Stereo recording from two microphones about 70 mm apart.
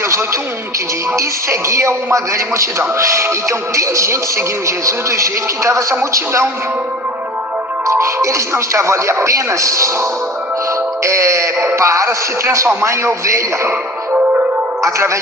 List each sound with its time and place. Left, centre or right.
1.1 s speech: right
7.9 s speech: right
14.8 s speech: right